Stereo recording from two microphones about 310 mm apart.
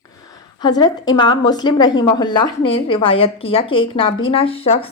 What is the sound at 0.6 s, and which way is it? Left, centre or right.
A woman's voice, centre.